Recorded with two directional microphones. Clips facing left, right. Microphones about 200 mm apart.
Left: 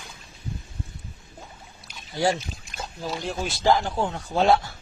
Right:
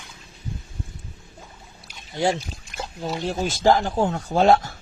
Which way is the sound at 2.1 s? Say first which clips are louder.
Right 1 dB; 25° right (ahead or behind).